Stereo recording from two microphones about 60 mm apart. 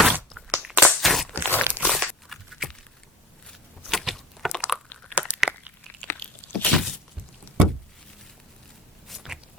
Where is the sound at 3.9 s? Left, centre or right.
Centre.